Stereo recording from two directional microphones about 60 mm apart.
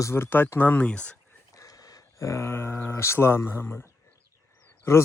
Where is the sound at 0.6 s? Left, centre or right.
Left.